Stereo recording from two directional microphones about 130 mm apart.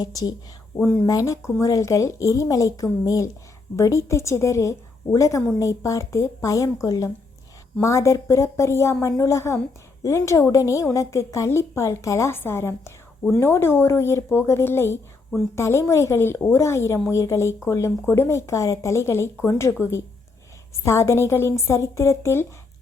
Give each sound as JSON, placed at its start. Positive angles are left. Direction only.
{"t": 0.0, "sound": "speech", "side_deg": 30}